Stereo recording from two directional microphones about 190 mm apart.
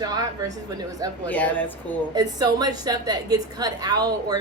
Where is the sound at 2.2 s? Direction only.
20° right (ahead or behind).